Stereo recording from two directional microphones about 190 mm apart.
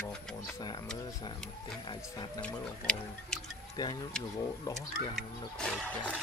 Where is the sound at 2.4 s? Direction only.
5° left (ahead or behind).